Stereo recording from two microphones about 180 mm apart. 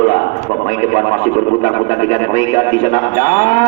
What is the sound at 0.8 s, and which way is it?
Speech, 45° left (ahead or behind).